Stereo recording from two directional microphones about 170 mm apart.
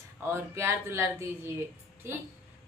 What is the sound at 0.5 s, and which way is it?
Female singing, 15° right (ahead or behind).